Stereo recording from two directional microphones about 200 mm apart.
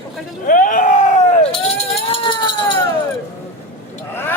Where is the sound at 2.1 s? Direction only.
25° left (ahead or behind).